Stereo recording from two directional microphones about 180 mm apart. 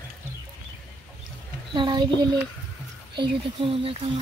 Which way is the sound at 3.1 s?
30° right (ahead or behind).